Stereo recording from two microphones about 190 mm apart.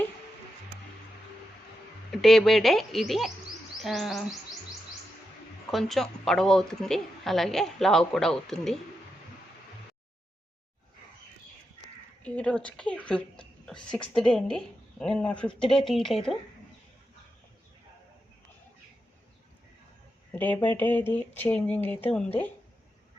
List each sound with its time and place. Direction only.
2.2 s a woman's voice: centre (ahead or behind)
5.7 s a woman's voice: centre (ahead or behind)
12.2 s a woman's voice: 5° left (ahead or behind)
20.3 s speech: 10° left (ahead or behind)